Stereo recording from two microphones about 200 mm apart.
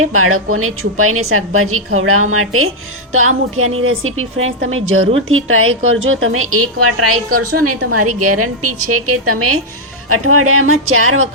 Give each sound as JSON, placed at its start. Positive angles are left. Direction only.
{"t": 0.0, "sound": "a woman's voice", "side_deg": -90}